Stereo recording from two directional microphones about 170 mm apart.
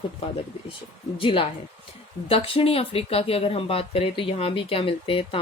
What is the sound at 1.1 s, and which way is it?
Speech, 30° left (ahead or behind).